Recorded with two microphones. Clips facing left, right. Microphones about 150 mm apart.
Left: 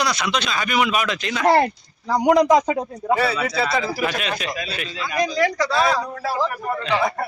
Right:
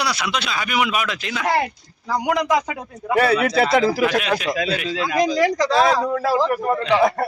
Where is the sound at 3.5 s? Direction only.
60° right (ahead or behind); by 4.2 s 90° right.